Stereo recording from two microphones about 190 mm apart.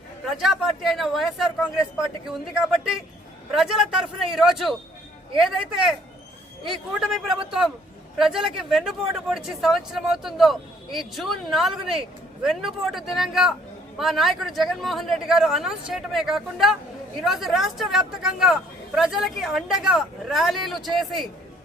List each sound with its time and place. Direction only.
0.3 s speech: centre (ahead or behind)